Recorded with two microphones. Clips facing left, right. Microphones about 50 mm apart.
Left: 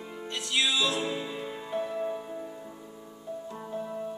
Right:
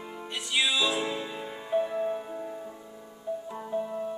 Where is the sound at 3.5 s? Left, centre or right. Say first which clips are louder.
Right 4 dB; centre.